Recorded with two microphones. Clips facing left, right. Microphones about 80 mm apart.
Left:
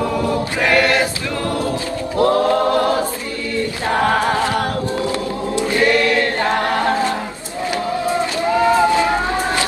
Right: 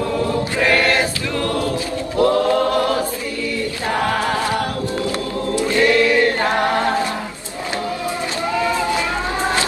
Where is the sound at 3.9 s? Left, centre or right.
Left.